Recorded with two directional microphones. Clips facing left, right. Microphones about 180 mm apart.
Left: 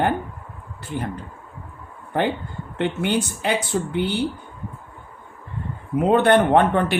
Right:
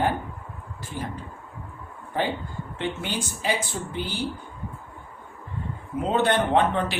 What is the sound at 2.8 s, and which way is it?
Speech, 60° left (ahead or behind).